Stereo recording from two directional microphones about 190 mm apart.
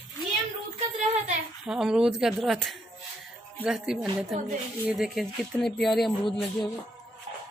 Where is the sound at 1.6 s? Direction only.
5° right (ahead or behind).